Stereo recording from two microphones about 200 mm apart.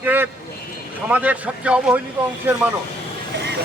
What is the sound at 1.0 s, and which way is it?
Speech, 5° right (ahead or behind).